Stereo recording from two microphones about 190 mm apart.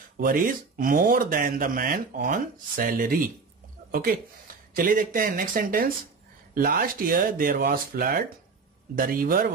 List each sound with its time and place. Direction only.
0.2 s speech: 45° right (ahead or behind)